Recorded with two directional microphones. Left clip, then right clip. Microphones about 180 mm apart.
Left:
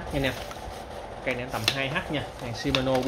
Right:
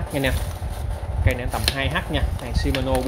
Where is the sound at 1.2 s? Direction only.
30° right (ahead or behind).